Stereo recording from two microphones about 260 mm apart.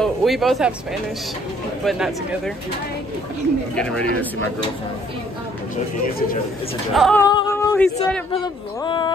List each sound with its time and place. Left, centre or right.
0.0 s speech: centre
1.9 s speech: centre
3.7 s speech: centre
6.9 s speech: centre
7.2 s a sound: centre
8.8 s speech: centre